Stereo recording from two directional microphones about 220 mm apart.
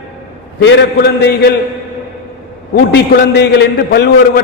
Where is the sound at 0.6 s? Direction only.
50° left (ahead or behind).